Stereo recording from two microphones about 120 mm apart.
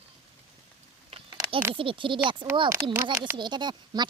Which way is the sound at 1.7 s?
45° right (ahead or behind).